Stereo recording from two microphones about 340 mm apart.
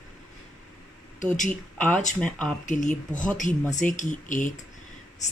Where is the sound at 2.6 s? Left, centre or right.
Left.